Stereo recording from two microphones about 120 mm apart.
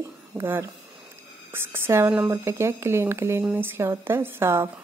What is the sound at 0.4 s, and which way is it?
A woman's voice, 20° right (ahead or behind).